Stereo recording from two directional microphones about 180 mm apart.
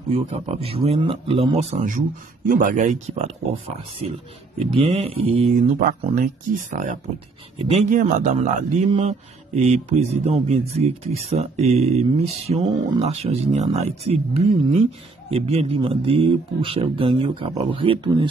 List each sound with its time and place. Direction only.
0.1 s speech: 35° right (ahead or behind)
4.6 s speech: 30° right (ahead or behind)
5.5 s speech: 45° right (ahead or behind); by 18.3 s 30° right (ahead or behind)